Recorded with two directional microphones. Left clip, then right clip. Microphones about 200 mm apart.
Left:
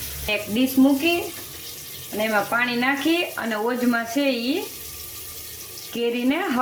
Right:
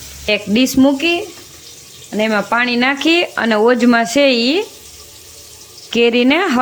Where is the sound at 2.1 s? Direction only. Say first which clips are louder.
Right 7 dB; 55° right (ahead or behind).